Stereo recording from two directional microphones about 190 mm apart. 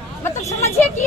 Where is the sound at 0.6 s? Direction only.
10° left (ahead or behind).